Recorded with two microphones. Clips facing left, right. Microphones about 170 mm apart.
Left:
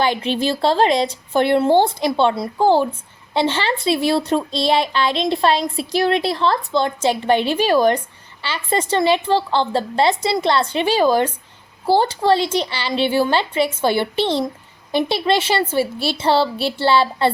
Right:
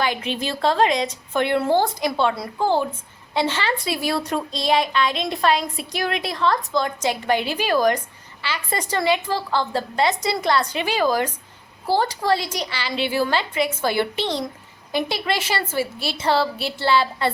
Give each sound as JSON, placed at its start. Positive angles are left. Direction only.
{"t": 0.0, "sound": "a woman's voice", "side_deg": 30}